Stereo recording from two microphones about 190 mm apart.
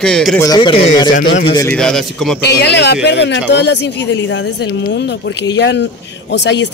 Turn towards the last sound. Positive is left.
turn(degrees=65)  # may be behind; listen again after turning